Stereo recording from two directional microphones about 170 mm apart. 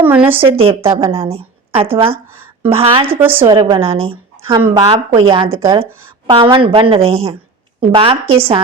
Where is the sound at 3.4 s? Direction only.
30° right (ahead or behind).